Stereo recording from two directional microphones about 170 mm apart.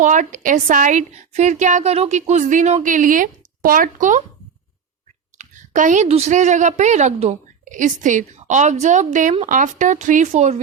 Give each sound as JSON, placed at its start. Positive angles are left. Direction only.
{"t": 0.0, "sound": "a woman's voice", "side_deg": -45}
{"t": 5.4, "sound": "a woman's voice", "side_deg": -45}